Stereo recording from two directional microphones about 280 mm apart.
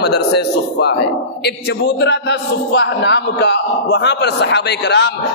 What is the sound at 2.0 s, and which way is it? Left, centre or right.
A man's voice, left.